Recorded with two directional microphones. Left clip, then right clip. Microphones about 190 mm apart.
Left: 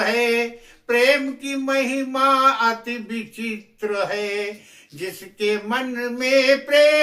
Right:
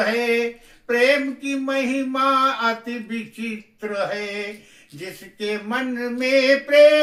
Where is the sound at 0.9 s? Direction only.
20° left (ahead or behind).